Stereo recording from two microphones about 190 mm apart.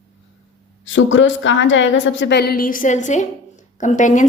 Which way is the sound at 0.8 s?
80° left.